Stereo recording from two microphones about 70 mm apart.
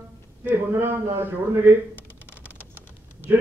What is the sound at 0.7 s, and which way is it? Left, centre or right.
A man's voice, right.